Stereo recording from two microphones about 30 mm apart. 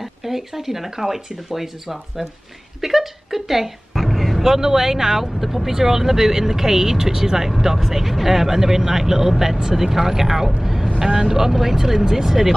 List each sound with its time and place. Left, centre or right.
0.0 s speech: centre
3.9 s a sound: centre
4.5 s speech: centre
5.2 s speech: centre
5.7 s speech: centre
10.6 s vehicle: centre
11.1 s speech: centre
12.3 s speech: centre